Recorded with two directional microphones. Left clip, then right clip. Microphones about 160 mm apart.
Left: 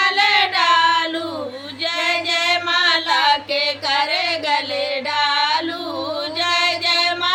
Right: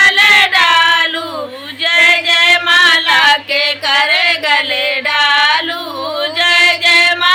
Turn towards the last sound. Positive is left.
turn(degrees=-5)  # may be behind; listen again after turning